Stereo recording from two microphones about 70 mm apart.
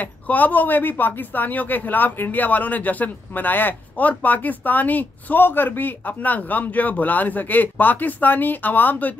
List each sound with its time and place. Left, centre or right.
0.0 s speech: left